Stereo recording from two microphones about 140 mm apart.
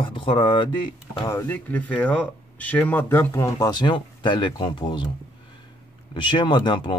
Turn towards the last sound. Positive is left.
turn(degrees=35)  # may be behind; listen again after turning